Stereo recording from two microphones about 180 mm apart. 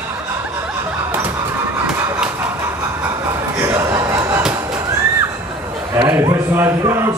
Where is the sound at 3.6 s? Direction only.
15° right (ahead or behind).